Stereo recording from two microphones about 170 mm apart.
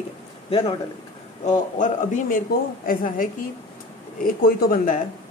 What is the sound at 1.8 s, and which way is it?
A man's voice, 50° left (ahead or behind).